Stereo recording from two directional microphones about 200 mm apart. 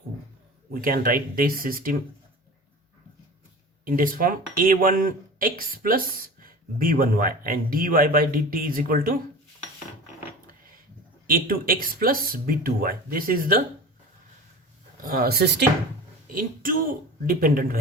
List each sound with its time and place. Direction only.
0.7 s speech: 45° right (ahead or behind)
3.8 s speech: 45° right (ahead or behind)
11.3 s speech: 45° right (ahead or behind)
15.0 s speech: 45° right (ahead or behind)
16.3 s speech: 45° right (ahead or behind)